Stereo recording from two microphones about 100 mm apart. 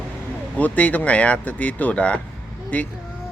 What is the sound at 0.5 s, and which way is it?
Speech, 15° left (ahead or behind).